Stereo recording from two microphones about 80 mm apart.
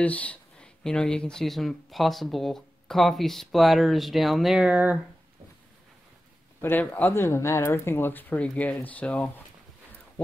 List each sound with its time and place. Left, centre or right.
0.0 s speech: centre
4.6 s speech: centre
6.6 s speech: left
7.2 s speech: left; by 9.3 s centre